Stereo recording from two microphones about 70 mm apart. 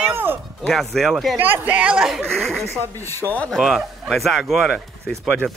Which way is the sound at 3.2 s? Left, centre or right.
Left.